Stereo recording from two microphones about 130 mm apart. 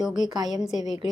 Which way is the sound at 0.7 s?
30° right (ahead or behind).